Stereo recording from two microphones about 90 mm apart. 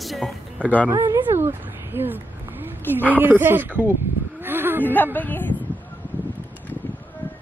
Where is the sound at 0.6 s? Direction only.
15° left (ahead or behind).